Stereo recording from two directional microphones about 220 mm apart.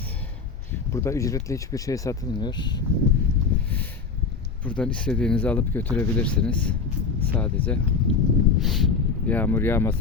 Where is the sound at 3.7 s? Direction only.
10° left (ahead or behind).